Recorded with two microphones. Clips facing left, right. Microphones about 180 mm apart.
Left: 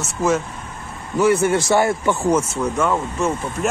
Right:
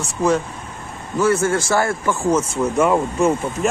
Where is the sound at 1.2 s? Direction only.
15° left (ahead or behind).